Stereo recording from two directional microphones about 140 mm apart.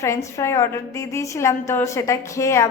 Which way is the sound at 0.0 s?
20° left (ahead or behind).